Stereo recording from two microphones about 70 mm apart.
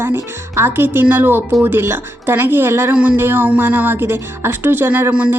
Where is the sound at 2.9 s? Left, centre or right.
Centre.